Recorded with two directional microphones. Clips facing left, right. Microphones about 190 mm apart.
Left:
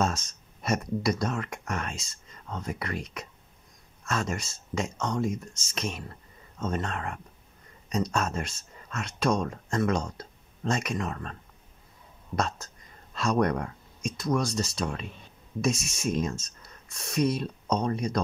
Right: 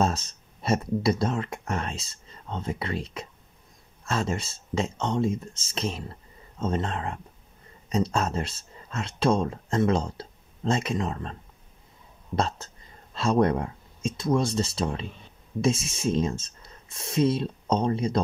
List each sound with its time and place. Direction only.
0.0 s speech: 30° right (ahead or behind)
12.4 s speech: 30° right (ahead or behind)